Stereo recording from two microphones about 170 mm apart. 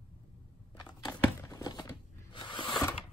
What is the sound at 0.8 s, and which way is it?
Crumpling, 20° left (ahead or behind).